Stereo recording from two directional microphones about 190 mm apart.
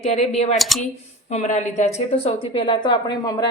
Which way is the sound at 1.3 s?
40° left (ahead or behind).